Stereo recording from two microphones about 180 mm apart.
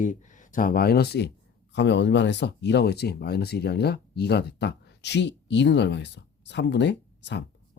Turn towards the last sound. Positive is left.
turn(degrees=75)  # may be behind; listen again after turning